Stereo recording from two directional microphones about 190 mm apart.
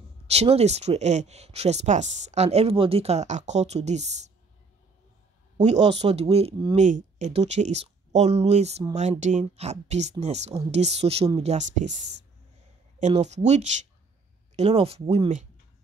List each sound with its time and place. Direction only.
0.3 s speech: 35° right (ahead or behind)
5.8 s speech: 30° right (ahead or behind)